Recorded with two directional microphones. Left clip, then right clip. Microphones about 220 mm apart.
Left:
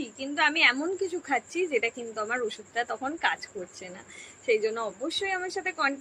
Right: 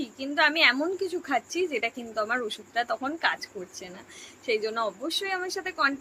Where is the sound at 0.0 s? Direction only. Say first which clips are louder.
Right 2 dB; 20° right (ahead or behind).